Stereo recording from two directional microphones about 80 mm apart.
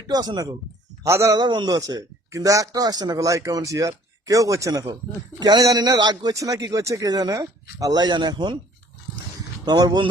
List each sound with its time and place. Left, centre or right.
0.1 s speech: right
1.0 s a man's voice: right
1.4 s a man's voice: right
2.3 s a man's voice: right
6.3 s speech: right
9.6 s a man's voice: right